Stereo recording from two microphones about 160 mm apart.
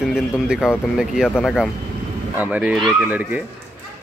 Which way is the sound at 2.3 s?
10° right (ahead or behind).